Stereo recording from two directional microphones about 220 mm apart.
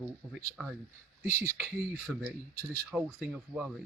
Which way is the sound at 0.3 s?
Centre (ahead or behind).